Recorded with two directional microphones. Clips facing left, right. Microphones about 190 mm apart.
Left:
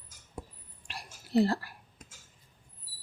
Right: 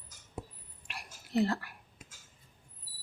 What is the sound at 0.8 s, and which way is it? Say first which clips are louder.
Whispering: left 2 dB; 35° left (ahead or behind).